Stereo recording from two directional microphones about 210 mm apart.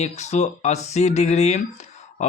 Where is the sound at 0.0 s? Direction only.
35° left (ahead or behind).